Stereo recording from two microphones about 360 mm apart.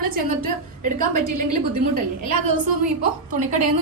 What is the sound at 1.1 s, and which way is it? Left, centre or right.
Speech, right.